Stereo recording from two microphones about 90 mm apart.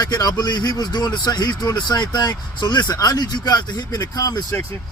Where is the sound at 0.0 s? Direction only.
50° left (ahead or behind).